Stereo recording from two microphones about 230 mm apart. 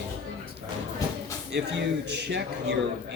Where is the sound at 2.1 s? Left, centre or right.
Right.